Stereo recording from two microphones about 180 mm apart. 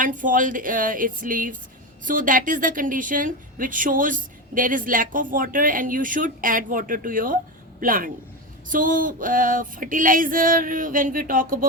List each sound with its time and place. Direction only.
0.0 s a woman's voice: 50° right (ahead or behind)